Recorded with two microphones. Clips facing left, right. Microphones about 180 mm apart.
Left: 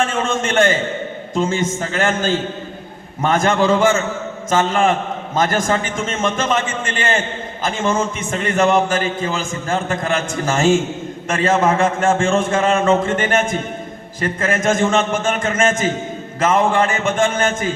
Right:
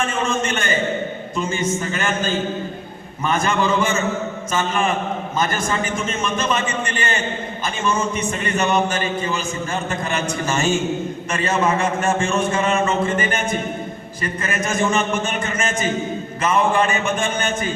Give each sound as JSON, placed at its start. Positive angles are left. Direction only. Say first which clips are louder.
{"t": 0.3, "sound": "a man's voice", "louder": "left 5 dB", "side_deg": 90}